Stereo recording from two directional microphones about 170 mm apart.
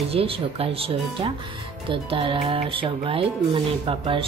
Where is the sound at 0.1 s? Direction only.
35° right (ahead or behind).